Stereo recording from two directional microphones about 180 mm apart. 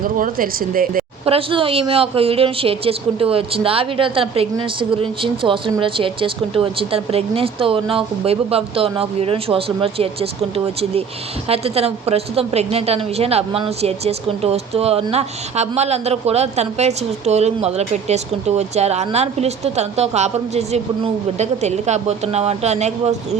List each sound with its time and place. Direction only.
0.0 s speech: 50° right (ahead or behind)
1.2 s a woman's voice: 30° right (ahead or behind)